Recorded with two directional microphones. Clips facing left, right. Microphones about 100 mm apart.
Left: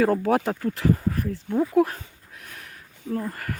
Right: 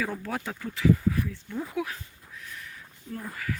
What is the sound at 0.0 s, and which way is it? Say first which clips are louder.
Speech: left 11 dB; 65° left (ahead or behind).